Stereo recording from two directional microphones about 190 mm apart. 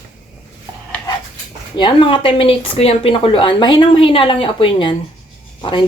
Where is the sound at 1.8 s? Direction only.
25° left (ahead or behind).